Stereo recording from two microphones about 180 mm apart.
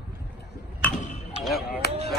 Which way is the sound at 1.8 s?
65° left (ahead or behind).